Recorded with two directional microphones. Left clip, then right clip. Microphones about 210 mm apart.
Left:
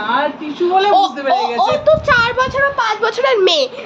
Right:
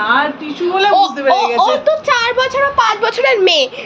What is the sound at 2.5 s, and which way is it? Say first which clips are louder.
A woman's voice: right 3 dB; centre (ahead or behind).